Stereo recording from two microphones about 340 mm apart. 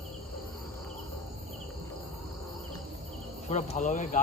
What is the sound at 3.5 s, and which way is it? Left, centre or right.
Speech, left.